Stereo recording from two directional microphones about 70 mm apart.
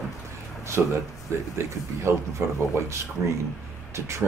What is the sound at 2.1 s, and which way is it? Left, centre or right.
Speech, right.